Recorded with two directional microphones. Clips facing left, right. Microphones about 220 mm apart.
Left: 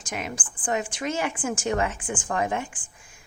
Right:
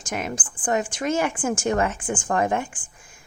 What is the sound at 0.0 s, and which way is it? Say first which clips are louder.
A woman's voice: right 4 dB; 45° right (ahead or behind).